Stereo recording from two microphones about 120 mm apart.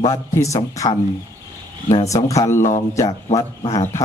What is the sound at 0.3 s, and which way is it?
Speech, 25° left (ahead or behind).